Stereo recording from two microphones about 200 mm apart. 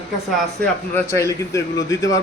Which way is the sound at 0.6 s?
10° left (ahead or behind).